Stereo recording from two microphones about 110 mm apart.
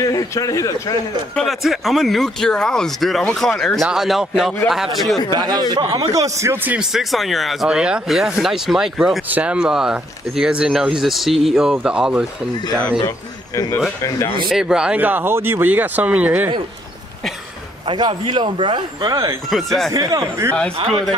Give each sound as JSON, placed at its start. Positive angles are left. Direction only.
{"t": 0.0, "sound": "speech", "side_deg": 30}
{"t": 1.3, "sound": "speech", "side_deg": 5}
{"t": 5.3, "sound": "a man's voice", "side_deg": -40}
{"t": 6.8, "sound": "speech", "side_deg": 0}
{"t": 14.0, "sound": "speech", "side_deg": 30}
{"t": 14.5, "sound": "speech", "side_deg": -5}
{"t": 17.8, "sound": "speech", "side_deg": -45}
{"t": 19.5, "sound": "speech", "side_deg": 0}
{"t": 19.9, "sound": "a man's voice", "side_deg": -35}
{"t": 20.5, "sound": "a man's voice", "side_deg": 10}